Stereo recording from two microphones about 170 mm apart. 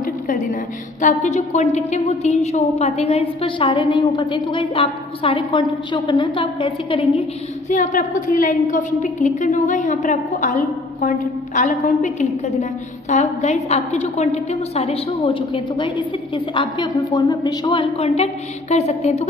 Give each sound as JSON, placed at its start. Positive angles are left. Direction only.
{"t": 0.0, "sound": "a sound", "side_deg": 50}
{"t": 1.0, "sound": "a woman's voice", "side_deg": 45}
{"t": 7.7, "sound": "a woman's voice", "side_deg": 50}